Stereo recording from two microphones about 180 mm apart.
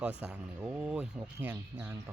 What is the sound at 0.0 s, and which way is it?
Speech, 5° right (ahead or behind).